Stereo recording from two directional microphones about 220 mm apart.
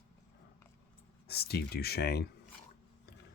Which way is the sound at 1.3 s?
45° left (ahead or behind).